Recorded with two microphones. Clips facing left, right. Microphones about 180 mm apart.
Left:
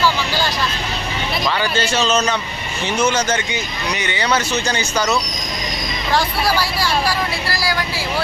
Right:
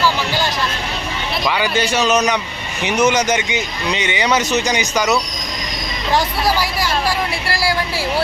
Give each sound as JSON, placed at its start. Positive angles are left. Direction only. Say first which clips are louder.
{"t": 1.5, "sound": "speech", "louder": "right 3 dB", "side_deg": -15}
{"t": 6.1, "sound": "speech", "louder": "right 1 dB", "side_deg": -20}